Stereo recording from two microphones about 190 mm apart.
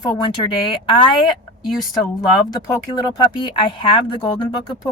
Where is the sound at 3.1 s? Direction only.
25° left (ahead or behind).